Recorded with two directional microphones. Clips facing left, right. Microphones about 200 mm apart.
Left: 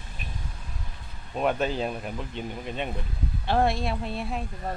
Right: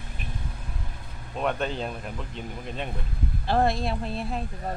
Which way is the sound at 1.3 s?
5° left (ahead or behind).